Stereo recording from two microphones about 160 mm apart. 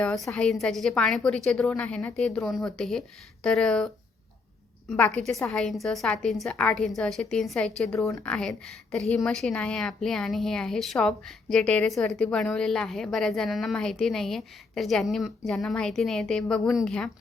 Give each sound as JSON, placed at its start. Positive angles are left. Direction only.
{"t": 0.0, "sound": "a woman's voice", "side_deg": 5}
{"t": 7.9, "sound": "a woman's voice", "side_deg": 20}
{"t": 8.2, "sound": "a woman's voice", "side_deg": 5}